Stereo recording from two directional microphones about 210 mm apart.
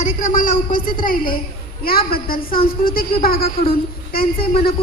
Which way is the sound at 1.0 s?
40° left (ahead or behind).